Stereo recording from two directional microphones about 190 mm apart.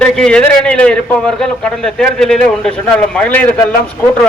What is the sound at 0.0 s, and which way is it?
A man's voice, 5° left (ahead or behind).